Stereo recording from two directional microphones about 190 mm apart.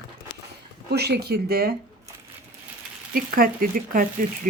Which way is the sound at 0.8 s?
60° right (ahead or behind).